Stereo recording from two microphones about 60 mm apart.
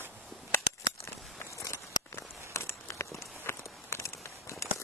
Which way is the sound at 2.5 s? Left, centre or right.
Left.